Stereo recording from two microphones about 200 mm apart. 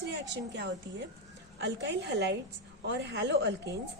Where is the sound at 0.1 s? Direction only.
60° right (ahead or behind).